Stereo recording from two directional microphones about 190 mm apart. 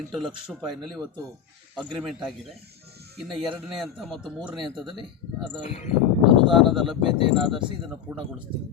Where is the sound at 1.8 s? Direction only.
Centre (ahead or behind).